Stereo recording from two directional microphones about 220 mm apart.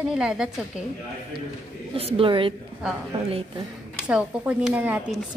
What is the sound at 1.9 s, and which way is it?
A woman's voice, 25° right (ahead or behind).